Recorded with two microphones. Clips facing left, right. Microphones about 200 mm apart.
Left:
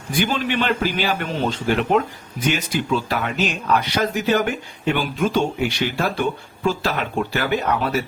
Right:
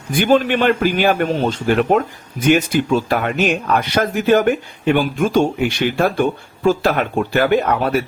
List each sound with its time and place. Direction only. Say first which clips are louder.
0.1 s speech: right 7 dB; 50° right (ahead or behind)